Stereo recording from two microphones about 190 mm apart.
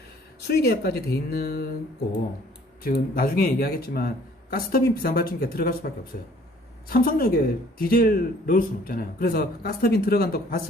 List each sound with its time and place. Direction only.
0.4 s speech: 55° left (ahead or behind)
2.8 s speech: 50° left (ahead or behind)